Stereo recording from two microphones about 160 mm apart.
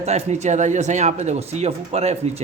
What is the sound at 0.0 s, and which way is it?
A man's voice, 45° right (ahead or behind).